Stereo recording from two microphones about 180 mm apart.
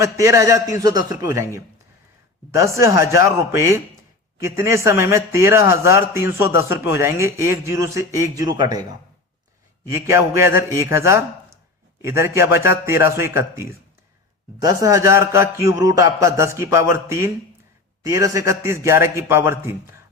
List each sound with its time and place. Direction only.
0.0 s a man's voice: 15° right (ahead or behind)
2.5 s a man's voice: 15° right (ahead or behind)
9.8 s a man's voice: 15° right (ahead or behind)